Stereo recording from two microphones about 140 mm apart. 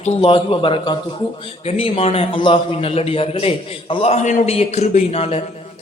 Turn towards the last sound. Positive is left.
turn(degrees=45)  # may be behind; listen again after turning